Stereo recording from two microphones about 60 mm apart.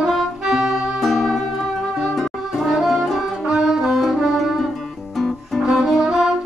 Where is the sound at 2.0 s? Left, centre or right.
Centre.